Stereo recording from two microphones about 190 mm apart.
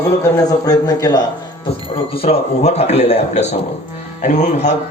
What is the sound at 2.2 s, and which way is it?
A man's voice, 35° left (ahead or behind).